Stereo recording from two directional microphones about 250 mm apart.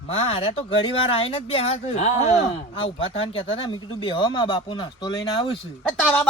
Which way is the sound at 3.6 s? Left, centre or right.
Centre.